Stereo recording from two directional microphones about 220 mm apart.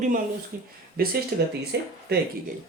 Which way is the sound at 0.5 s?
40° right (ahead or behind).